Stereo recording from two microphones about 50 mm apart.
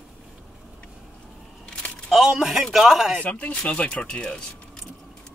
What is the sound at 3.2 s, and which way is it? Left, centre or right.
Speech, left.